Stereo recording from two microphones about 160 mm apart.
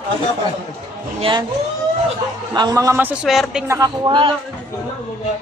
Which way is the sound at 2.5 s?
25° right (ahead or behind).